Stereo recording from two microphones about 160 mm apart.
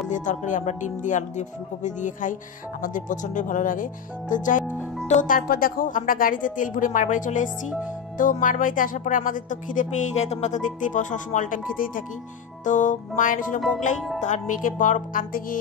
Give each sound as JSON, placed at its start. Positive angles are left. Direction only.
{"t": 0.1, "sound": "speech", "side_deg": 50}